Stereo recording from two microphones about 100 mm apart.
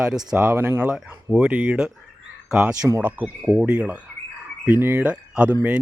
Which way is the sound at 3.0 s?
20° right (ahead or behind).